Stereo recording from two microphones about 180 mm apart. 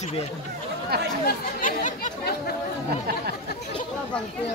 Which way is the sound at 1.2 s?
55° left (ahead or behind).